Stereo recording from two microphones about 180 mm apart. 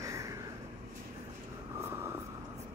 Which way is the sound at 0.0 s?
15° right (ahead or behind).